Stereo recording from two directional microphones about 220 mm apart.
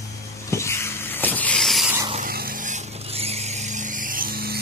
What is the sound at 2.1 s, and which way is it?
Vehicle, 40° right (ahead or behind).